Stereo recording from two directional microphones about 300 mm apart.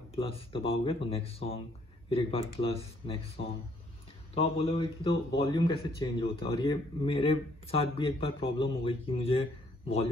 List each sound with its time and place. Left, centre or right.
0.1 s a man's voice: centre